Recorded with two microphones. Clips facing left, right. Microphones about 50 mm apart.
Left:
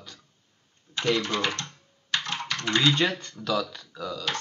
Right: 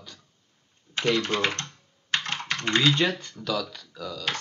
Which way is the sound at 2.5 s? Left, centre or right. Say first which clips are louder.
Right 1 dB; right.